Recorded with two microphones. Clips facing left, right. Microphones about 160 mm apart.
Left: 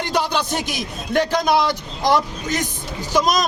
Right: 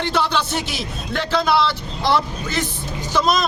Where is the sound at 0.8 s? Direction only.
45° left (ahead or behind).